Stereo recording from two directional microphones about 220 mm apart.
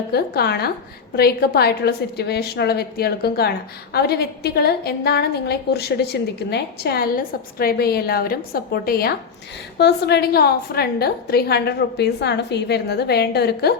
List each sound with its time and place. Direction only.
0.1 s a woman's voice: 45° left (ahead or behind)